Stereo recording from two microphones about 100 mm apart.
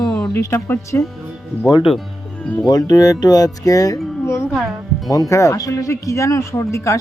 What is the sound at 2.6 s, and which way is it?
Speech, 40° left (ahead or behind).